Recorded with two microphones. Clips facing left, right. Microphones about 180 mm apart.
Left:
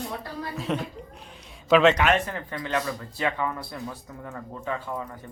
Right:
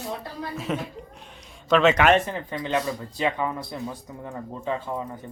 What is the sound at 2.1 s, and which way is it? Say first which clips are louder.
Speech: right 4 dB; 20° right (ahead or behind).